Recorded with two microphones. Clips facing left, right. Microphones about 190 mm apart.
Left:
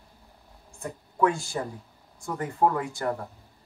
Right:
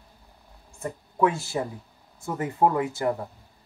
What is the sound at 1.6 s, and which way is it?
Speech, 15° right (ahead or behind).